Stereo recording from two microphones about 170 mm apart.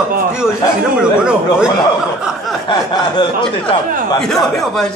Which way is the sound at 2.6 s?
25° left (ahead or behind).